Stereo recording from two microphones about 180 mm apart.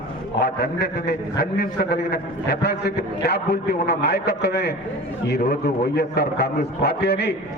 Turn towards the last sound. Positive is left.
turn(degrees=65)  # may be behind; listen again after turning